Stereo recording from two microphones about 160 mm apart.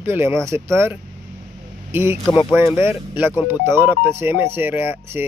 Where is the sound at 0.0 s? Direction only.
15° right (ahead or behind).